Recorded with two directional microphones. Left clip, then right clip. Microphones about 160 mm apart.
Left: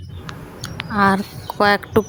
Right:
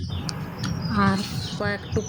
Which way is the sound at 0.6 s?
35° left (ahead or behind).